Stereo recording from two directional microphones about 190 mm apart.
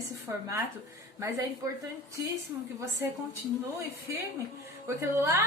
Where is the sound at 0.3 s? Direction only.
15° right (ahead or behind).